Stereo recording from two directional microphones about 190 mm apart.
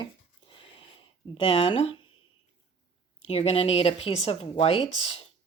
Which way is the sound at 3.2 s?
30° left (ahead or behind).